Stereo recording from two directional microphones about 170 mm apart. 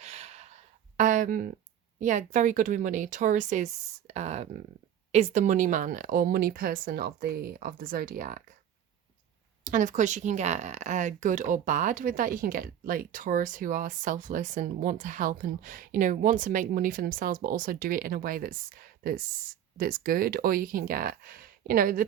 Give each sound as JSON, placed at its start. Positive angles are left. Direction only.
{"t": 0.0, "sound": "gasp", "side_deg": -40}
{"t": 2.0, "sound": "a woman's voice", "side_deg": -45}
{"t": 9.6, "sound": "a woman's voice", "side_deg": -45}